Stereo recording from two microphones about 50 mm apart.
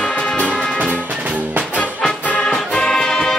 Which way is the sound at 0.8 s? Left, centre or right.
Right.